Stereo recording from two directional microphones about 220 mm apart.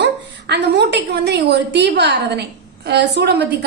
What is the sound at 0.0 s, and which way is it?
A woman's voice, 50° right (ahead or behind).